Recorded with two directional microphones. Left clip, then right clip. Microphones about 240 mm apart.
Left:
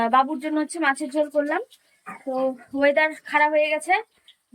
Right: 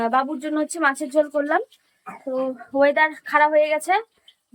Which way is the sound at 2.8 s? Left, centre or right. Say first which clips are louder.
Right 2 dB; centre.